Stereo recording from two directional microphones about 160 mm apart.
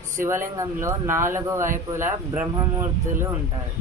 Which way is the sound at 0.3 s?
15° right (ahead or behind).